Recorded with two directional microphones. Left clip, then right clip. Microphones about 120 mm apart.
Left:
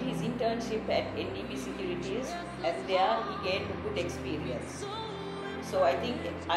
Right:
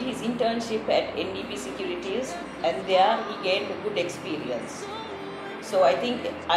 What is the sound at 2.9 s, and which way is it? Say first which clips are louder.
A woman's voice: right 7 dB; 15° right (ahead or behind).